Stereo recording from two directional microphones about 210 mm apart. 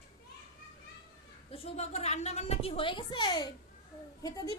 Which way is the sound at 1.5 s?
30° left (ahead or behind).